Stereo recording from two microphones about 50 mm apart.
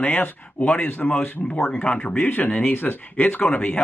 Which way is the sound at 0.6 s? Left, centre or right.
Left.